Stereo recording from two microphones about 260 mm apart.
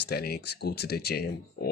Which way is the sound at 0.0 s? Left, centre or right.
Left.